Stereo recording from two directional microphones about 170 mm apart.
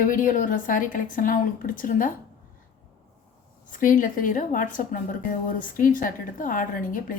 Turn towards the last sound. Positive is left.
turn(degrees=55)  # may be behind; listen again after turning